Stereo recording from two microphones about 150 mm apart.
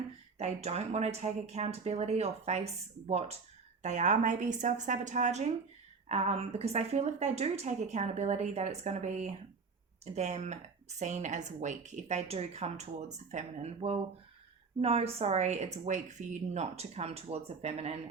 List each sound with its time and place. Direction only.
0.3 s speech: 45° right (ahead or behind)